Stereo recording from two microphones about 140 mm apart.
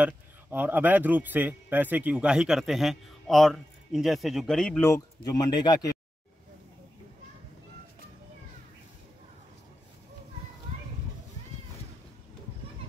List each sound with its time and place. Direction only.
0.0 s a man's voice: 15° right (ahead or behind); by 4.8 s 5° left (ahead or behind)
5.2 s speech: 30° left (ahead or behind)